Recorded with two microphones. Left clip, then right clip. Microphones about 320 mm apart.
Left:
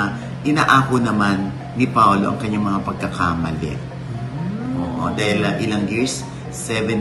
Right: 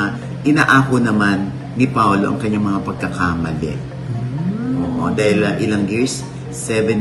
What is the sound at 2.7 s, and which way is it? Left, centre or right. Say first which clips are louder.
Speech: right 1 dB; left.